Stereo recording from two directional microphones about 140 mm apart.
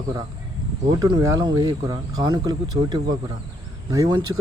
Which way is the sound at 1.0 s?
30° right (ahead or behind).